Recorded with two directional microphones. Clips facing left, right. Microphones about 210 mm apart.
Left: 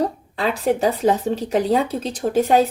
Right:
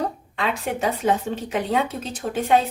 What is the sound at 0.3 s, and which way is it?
Speech, 35° left (ahead or behind).